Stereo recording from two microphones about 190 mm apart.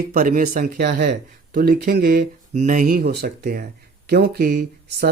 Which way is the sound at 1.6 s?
50° right (ahead or behind).